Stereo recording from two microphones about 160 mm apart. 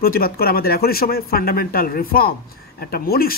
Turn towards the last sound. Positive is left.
turn(degrees=70)  # may be behind; listen again after turning